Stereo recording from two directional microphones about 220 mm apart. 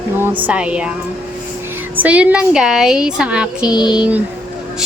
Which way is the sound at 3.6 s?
20° left (ahead or behind).